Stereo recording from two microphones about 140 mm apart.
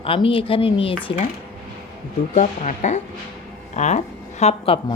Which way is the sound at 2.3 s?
60° left (ahead or behind).